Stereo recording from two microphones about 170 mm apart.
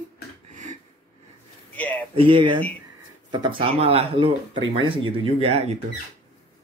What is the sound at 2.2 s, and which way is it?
Speech, 30° right (ahead or behind).